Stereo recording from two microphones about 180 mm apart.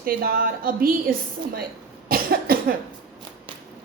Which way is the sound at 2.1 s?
55° right (ahead or behind).